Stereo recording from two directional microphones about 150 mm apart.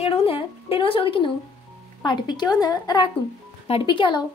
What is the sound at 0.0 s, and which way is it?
A woman's voice, 40° left (ahead or behind).